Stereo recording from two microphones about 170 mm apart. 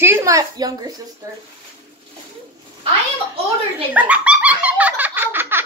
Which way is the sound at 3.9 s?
5° right (ahead or behind).